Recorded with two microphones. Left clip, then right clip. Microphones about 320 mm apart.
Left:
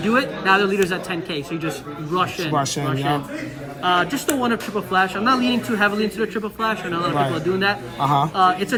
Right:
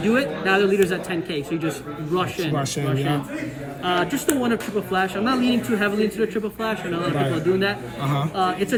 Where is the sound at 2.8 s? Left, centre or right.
Left.